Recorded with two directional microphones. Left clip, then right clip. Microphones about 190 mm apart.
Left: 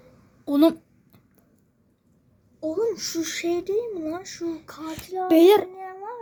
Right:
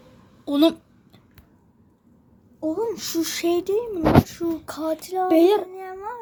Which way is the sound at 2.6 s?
25° right (ahead or behind).